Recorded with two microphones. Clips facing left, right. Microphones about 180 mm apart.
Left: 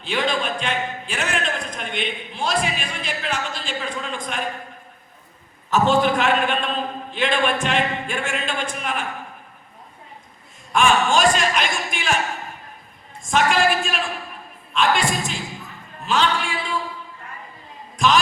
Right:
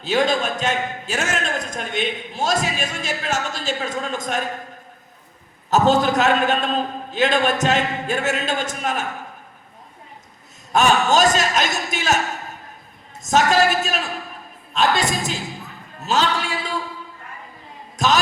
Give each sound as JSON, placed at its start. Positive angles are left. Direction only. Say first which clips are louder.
{"t": 0.0, "sound": "a man's voice", "louder": "right 4 dB", "side_deg": -40}
{"t": 5.7, "sound": "a man's voice", "louder": "right 1 dB", "side_deg": -40}
{"t": 10.7, "sound": "a man's voice", "louder": "right 1 dB", "side_deg": -40}
{"t": 13.2, "sound": "a man's voice", "louder": "right 2 dB", "side_deg": -40}
{"t": 17.9, "sound": "a sound", "louder": "left 1 dB", "side_deg": -40}